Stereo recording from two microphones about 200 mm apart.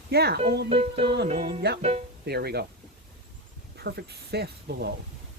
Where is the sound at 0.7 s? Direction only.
30° right (ahead or behind).